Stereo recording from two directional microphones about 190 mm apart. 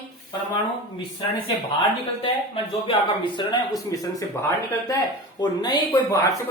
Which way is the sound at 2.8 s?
25° left (ahead or behind).